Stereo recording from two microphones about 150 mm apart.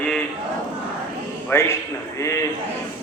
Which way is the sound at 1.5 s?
20° left (ahead or behind).